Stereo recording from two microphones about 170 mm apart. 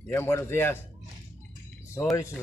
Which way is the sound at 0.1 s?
15° left (ahead or behind).